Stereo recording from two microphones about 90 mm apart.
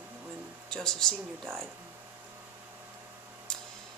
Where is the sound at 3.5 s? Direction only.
5° left (ahead or behind).